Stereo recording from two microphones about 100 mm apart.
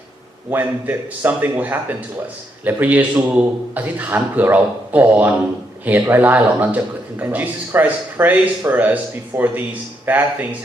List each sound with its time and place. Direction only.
0.5 s a man's voice: 20° right (ahead or behind)